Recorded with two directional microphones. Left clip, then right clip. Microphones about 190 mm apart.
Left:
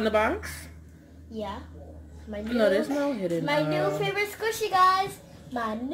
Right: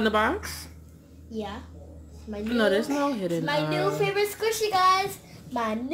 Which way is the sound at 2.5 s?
10° right (ahead or behind).